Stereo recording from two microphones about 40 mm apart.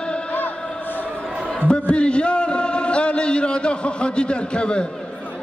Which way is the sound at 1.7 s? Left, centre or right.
Left.